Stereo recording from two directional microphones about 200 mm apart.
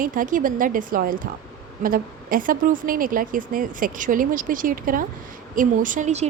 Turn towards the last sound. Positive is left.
turn(degrees=-35)  # may be behind; listen again after turning